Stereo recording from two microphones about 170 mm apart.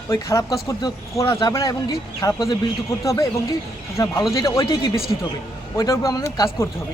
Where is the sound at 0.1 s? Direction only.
15° left (ahead or behind).